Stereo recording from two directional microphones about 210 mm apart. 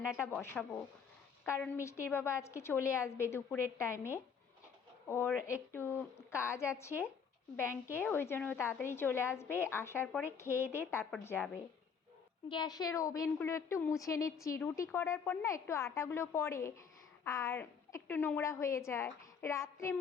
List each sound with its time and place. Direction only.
0.2 s a woman's voice: 10° left (ahead or behind)
5.0 s a woman's voice: 10° left (ahead or behind)
5.3 s speech: 5° right (ahead or behind)
5.7 s a woman's voice: 10° left (ahead or behind)